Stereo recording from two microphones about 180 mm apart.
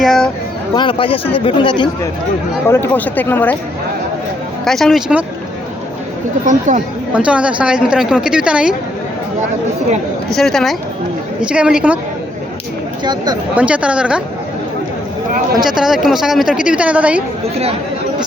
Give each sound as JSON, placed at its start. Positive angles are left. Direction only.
{"t": 0.0, "sound": "a woman's voice", "side_deg": 0}
{"t": 0.7, "sound": "speech", "side_deg": 25}
{"t": 2.6, "sound": "speech", "side_deg": 15}
{"t": 4.6, "sound": "a woman's voice", "side_deg": 0}
{"t": 6.4, "sound": "speech", "side_deg": -45}
{"t": 7.1, "sound": "a woman's voice", "side_deg": -5}
{"t": 10.3, "sound": "a woman's voice", "side_deg": 0}
{"t": 13.6, "sound": "a woman's voice", "side_deg": -5}
{"t": 15.6, "sound": "a woman's voice", "side_deg": 0}